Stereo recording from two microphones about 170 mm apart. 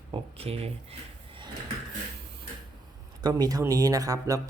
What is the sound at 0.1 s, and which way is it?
Speech, 35° right (ahead or behind).